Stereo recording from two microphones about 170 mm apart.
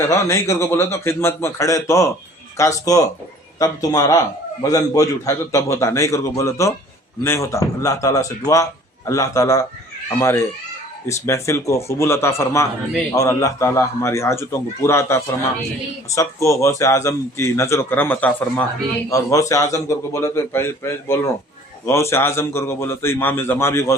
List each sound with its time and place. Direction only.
0.0 s a man's voice: 15° left (ahead or behind)